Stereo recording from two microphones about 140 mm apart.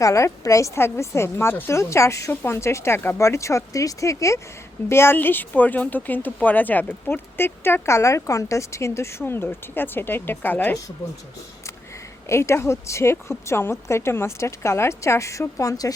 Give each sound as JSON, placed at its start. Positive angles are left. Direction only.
{"t": 0.0, "sound": "a woman's voice", "side_deg": 20}
{"t": 12.3, "sound": "a woman's voice", "side_deg": 20}